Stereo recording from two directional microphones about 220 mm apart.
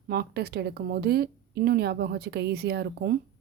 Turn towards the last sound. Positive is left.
turn(degrees=-50)  # may be behind; listen again after turning